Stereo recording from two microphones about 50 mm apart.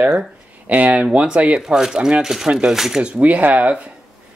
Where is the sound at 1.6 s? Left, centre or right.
Centre.